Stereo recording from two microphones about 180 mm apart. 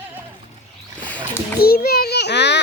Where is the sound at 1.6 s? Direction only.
60° left (ahead or behind).